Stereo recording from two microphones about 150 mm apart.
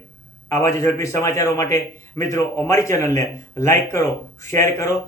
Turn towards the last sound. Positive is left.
turn(degrees=20)  # may be behind; listen again after turning